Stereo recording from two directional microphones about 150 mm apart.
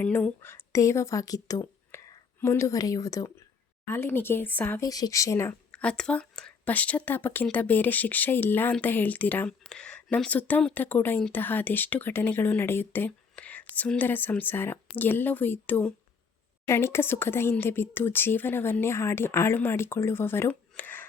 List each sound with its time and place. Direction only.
0.0 s a woman's voice: 10° left (ahead or behind)
4.9 s speech: 25° left (ahead or behind)
5.7 s speech: 5° left (ahead or behind)